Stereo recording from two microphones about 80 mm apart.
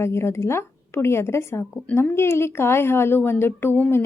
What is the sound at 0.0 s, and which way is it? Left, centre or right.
Speech, left.